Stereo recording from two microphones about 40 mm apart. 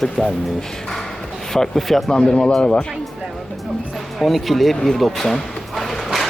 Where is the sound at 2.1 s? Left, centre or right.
Centre.